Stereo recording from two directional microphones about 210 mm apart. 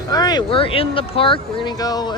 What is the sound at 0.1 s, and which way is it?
Speech, 20° left (ahead or behind).